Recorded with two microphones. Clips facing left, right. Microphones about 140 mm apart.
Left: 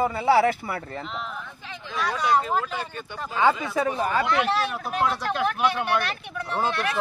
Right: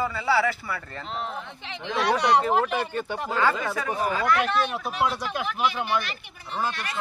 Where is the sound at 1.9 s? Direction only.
75° right (ahead or behind).